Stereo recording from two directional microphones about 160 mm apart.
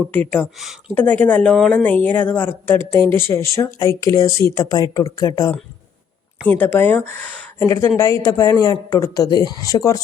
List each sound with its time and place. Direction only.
0.1 s speech: 10° left (ahead or behind)
6.5 s speech: 10° left (ahead or behind)